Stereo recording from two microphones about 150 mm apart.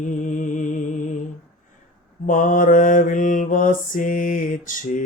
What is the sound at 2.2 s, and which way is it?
Mantra, 60° left (ahead or behind).